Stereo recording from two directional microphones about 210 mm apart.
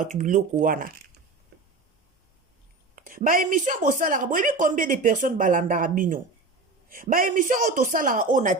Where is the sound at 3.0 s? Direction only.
40° right (ahead or behind).